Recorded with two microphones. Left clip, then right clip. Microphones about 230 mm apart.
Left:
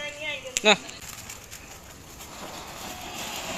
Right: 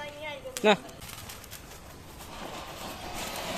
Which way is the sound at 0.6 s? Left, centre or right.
Right.